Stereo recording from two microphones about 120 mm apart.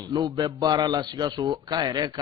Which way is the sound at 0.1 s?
35° right (ahead or behind).